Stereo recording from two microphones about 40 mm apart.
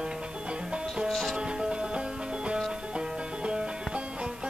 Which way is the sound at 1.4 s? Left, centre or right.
Right.